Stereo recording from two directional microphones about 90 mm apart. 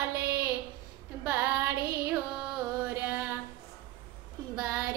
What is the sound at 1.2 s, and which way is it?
Female singing, 30° right (ahead or behind).